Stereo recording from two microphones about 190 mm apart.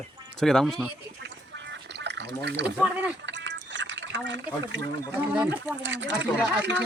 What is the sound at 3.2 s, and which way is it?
Liquid, 70° right (ahead or behind).